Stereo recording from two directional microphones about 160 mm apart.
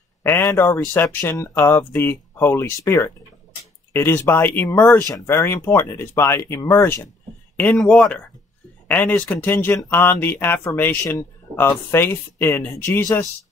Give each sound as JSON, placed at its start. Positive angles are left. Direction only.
{"t": 0.2, "sound": "speech", "side_deg": 15}
{"t": 7.5, "sound": "speech", "side_deg": 5}